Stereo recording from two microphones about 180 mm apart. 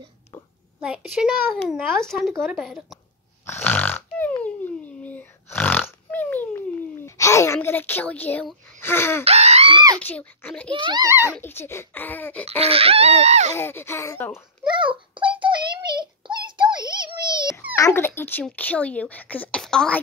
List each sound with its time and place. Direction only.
0.7 s a child's voice: 5° right (ahead or behind)
3.4 s a sound: 10° left (ahead or behind)
8.8 s speech: 15° left (ahead or behind)
9.2 s a sound: 35° right (ahead or behind)
9.9 s speech: 10° left (ahead or behind)
10.7 s speech: 25° right (ahead or behind)
11.3 s speech: 10° left (ahead or behind)
12.4 s speech: 35° right (ahead or behind)
13.6 s speech: 15° left (ahead or behind)
14.7 s child singing: 25° right (ahead or behind)
17.7 s speech: 15° left (ahead or behind)